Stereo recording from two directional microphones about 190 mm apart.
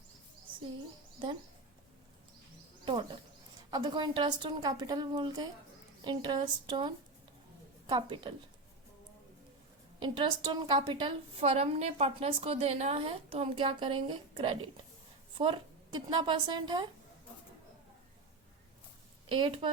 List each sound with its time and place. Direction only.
2.8 s a woman's voice: 25° right (ahead or behind)
10.0 s a woman's voice: 25° right (ahead or behind)
19.3 s a woman's voice: 25° right (ahead or behind)